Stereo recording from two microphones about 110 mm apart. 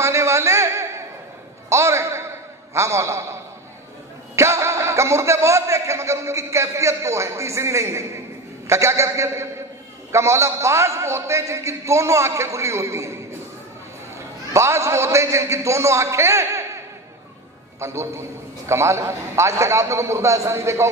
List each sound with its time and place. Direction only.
0.0 s a sound: 25° right (ahead or behind)
1.7 s a man's voice: 25° right (ahead or behind)
4.4 s a man's voice: 25° right (ahead or behind)
17.7 s a man's voice: 25° right (ahead or behind)